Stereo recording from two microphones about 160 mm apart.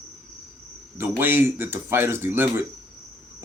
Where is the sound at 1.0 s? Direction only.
15° right (ahead or behind).